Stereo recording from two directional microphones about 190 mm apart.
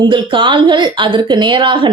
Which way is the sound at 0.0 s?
25° right (ahead or behind).